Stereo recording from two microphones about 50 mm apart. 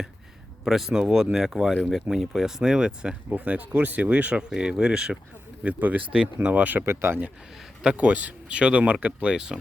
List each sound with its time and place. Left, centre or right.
0.6 s speech: centre
3.3 s speech: right; by 5.1 s centre
5.8 s speech: right
6.8 s speech: right
7.8 s speech: right
9.3 s speech: centre